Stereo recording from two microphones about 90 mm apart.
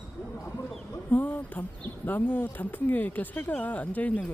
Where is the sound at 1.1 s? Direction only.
20° left (ahead or behind).